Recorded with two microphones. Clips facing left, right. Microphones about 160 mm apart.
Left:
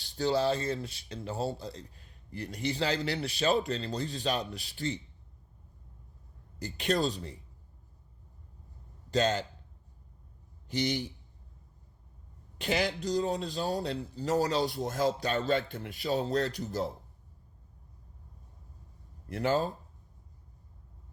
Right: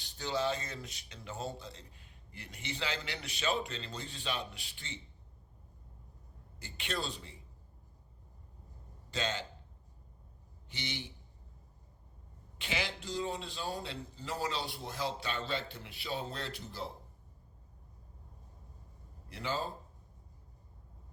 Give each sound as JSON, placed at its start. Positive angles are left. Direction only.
{"t": 0.0, "sound": "speech", "side_deg": 35}
{"t": 6.6, "sound": "speech", "side_deg": 40}
{"t": 9.0, "sound": "a man's voice", "side_deg": 40}
{"t": 10.7, "sound": "speech", "side_deg": 40}
{"t": 12.5, "sound": "speech", "side_deg": 40}
{"t": 19.3, "sound": "speech", "side_deg": 50}